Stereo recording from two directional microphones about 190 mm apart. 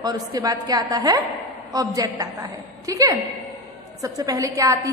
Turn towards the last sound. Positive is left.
turn(degrees=-15)  # may be behind; listen again after turning